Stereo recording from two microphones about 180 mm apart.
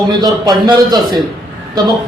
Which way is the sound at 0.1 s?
20° right (ahead or behind).